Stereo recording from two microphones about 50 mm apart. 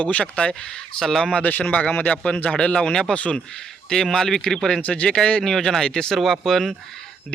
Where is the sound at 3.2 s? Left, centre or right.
Left.